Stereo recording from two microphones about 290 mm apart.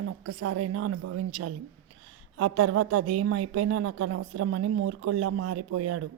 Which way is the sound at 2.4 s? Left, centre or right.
Right.